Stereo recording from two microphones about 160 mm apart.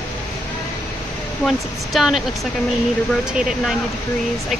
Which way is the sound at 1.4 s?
Centre (ahead or behind).